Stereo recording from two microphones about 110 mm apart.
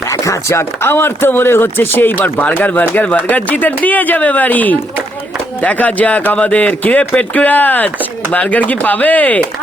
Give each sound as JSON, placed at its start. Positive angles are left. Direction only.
{"t": 0.1, "sound": "speech", "side_deg": 25}